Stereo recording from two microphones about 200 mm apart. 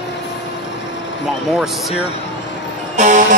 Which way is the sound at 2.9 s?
40° right (ahead or behind).